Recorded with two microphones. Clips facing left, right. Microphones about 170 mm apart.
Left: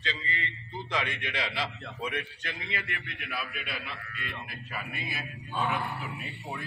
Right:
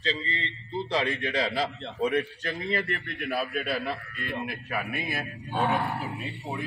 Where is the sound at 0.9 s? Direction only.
35° right (ahead or behind).